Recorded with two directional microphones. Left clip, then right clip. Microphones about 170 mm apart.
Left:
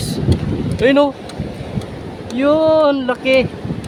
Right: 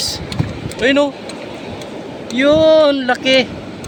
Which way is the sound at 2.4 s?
20° left (ahead or behind).